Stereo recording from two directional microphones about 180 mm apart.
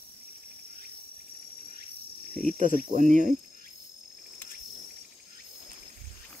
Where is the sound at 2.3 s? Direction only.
5° left (ahead or behind).